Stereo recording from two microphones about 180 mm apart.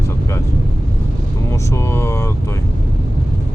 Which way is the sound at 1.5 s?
15° left (ahead or behind).